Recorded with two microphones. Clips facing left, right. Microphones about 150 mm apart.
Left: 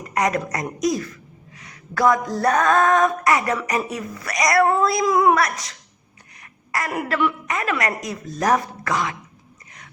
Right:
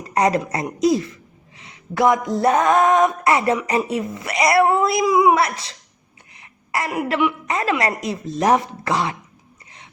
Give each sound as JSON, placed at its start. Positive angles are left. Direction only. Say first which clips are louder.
{"t": 0.0, "sound": "a sound", "louder": "right 3 dB", "side_deg": -30}
{"t": 0.5, "sound": "speech", "louder": "right 4 dB", "side_deg": -25}
{"t": 5.0, "sound": "a woman's voice", "louder": "right 2 dB", "side_deg": -10}
{"t": 5.3, "sound": "speech", "louder": "right 1 dB", "side_deg": -25}
{"t": 6.4, "sound": "a sound", "louder": "right 2 dB", "side_deg": -25}
{"t": 7.1, "sound": "a woman's voice", "louder": "right 1 dB", "side_deg": -15}
{"t": 7.4, "sound": "speech", "louder": "right 3 dB", "side_deg": -30}